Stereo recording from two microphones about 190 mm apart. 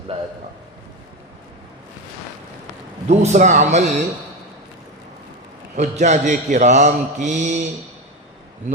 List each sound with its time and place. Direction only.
3.1 s mantra: 40° right (ahead or behind)
5.7 s mantra: 40° right (ahead or behind)